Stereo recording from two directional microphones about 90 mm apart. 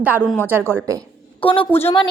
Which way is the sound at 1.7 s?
25° left (ahead or behind).